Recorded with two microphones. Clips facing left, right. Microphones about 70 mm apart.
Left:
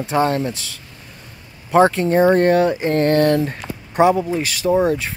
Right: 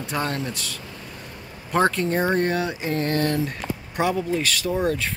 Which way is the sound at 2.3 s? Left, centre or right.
Left.